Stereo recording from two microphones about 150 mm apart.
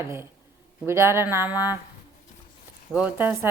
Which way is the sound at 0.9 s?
15° right (ahead or behind).